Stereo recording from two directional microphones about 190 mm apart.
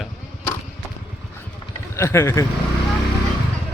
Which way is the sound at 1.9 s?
15° left (ahead or behind).